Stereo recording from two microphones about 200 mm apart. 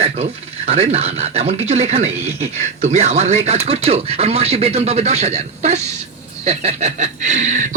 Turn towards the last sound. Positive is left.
turn(degrees=-35)  # may be behind; listen again after turning